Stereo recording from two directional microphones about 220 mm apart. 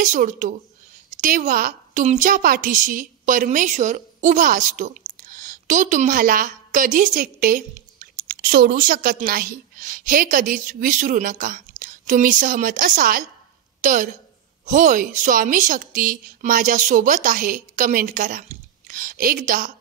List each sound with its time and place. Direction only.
0.0 s a woman's voice: 35° right (ahead or behind)